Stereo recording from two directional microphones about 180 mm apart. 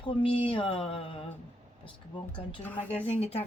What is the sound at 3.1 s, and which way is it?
Speech, 35° left (ahead or behind).